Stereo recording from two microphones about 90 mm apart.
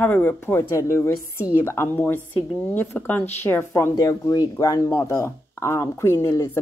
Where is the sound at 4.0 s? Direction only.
40° left (ahead or behind).